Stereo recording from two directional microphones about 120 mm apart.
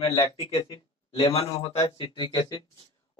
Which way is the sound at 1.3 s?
55° left (ahead or behind).